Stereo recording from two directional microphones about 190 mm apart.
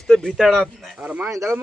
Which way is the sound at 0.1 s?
5° left (ahead or behind).